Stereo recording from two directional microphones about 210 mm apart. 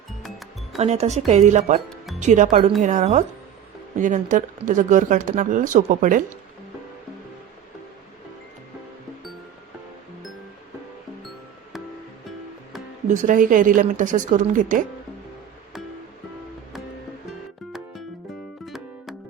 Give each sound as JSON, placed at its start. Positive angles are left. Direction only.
{"t": 0.2, "sound": "music", "side_deg": 0}
{"t": 0.8, "sound": "speech", "side_deg": -30}
{"t": 13.1, "sound": "speech", "side_deg": -40}
{"t": 17.7, "sound": "music", "side_deg": 0}